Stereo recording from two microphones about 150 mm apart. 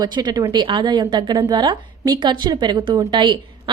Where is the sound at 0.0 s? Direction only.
25° right (ahead or behind).